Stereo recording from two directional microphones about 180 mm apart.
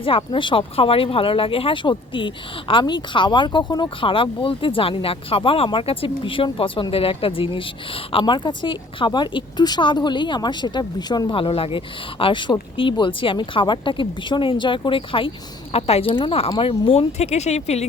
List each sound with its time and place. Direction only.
0.0 s speech: 30° left (ahead or behind)